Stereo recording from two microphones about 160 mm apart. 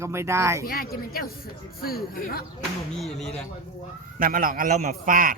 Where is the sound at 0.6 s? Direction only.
65° left (ahead or behind).